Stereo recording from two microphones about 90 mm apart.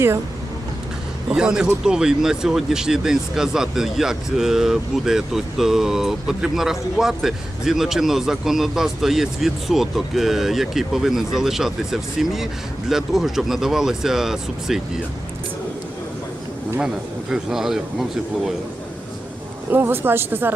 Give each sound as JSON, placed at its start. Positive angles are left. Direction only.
{"t": 1.3, "sound": "speech", "side_deg": -5}
{"t": 16.8, "sound": "speech", "side_deg": -5}
{"t": 19.7, "sound": "a woman's voice", "side_deg": -25}